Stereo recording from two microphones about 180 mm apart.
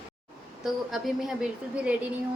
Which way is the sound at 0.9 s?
Centre (ahead or behind).